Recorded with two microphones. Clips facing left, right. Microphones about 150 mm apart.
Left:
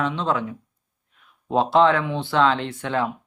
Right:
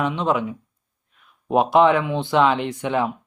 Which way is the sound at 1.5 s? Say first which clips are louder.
Right 2 dB; 15° right (ahead or behind).